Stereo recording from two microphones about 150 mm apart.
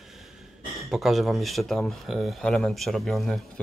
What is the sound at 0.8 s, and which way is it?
Speech, centre (ahead or behind).